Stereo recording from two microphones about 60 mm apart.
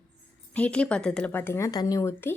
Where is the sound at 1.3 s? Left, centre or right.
Left.